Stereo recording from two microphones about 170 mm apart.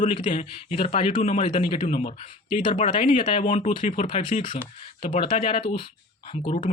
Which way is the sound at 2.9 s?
30° left (ahead or behind).